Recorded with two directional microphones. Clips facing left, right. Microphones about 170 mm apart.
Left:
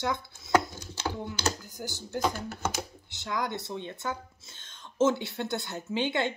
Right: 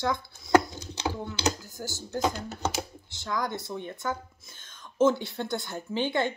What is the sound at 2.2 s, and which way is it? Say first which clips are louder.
Speech: right 1 dB; 20° right (ahead or behind).